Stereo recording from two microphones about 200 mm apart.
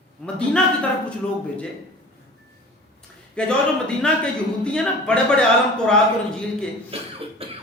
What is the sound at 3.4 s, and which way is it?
A man's voice, 5° left (ahead or behind).